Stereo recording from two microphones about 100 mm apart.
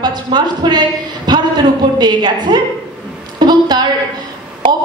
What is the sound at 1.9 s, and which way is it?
Speech, 45° right (ahead or behind).